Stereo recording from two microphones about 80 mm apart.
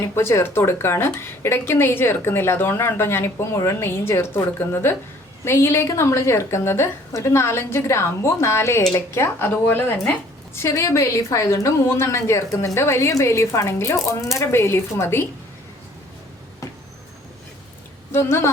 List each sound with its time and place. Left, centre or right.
0.1 s a woman's voice: left
18.1 s a woman's voice: left